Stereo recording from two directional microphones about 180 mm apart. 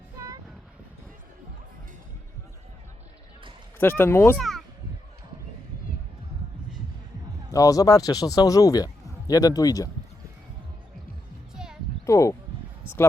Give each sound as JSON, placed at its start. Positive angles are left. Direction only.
{"t": 3.8, "sound": "speech", "side_deg": 10}
{"t": 4.4, "sound": "speech", "side_deg": 0}
{"t": 7.5, "sound": "a man's voice", "side_deg": 20}
{"t": 11.5, "sound": "music", "side_deg": -5}
{"t": 12.0, "sound": "speech", "side_deg": 15}